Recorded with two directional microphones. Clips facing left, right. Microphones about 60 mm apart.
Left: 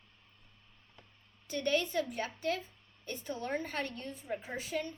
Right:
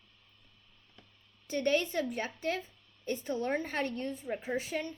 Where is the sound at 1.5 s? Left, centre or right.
Right.